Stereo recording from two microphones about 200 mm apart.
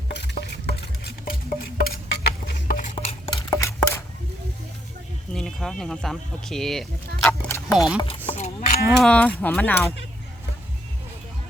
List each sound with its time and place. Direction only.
0.1 s patter: 55° left (ahead or behind)
2.9 s stir: 30° left (ahead or behind)
3.5 s a sound: 15° left (ahead or behind)
5.3 s speech: centre (ahead or behind)
7.7 s speech: centre (ahead or behind)
8.3 s cattle: 35° left (ahead or behind)
8.9 s speech: 5° left (ahead or behind)